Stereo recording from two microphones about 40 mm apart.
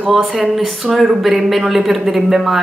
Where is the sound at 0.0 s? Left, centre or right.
Centre.